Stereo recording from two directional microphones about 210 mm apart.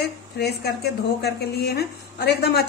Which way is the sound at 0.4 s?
50° left (ahead or behind).